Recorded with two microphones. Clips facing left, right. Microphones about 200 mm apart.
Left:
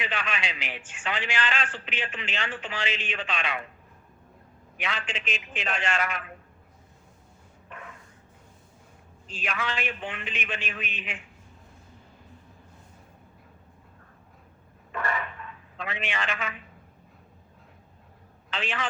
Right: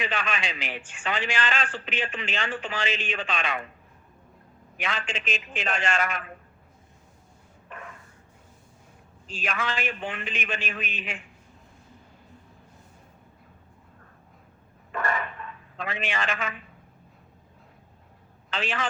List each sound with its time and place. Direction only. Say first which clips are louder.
0.0 s a sound: right 2 dB; 45° right (ahead or behind)
1.0 s a man's voice: right 2 dB; 40° right (ahead or behind)
4.8 s a man's voice: right 2 dB; 45° right (ahead or behind)
9.4 s a man's voice: right 2 dB; 45° right (ahead or behind)
14.9 s a sound: right 2 dB; 45° right (ahead or behind)
15.8 s a man's voice: right 2 dB; 45° right (ahead or behind)
18.5 s a man's voice: right 2 dB; 40° right (ahead or behind)